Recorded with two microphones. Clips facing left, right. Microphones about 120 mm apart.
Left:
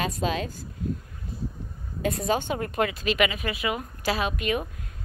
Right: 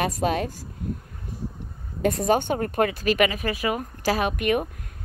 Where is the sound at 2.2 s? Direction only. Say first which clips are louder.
Right 5 dB; 50° right (ahead or behind).